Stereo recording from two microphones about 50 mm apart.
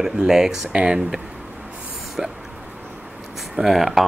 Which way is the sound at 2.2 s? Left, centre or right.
Centre.